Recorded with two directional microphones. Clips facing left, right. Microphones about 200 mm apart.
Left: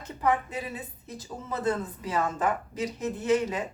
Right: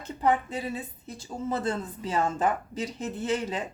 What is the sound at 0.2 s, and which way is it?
A woman's voice, 30° right (ahead or behind).